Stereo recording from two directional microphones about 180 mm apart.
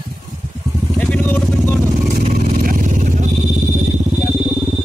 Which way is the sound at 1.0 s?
10° left (ahead or behind).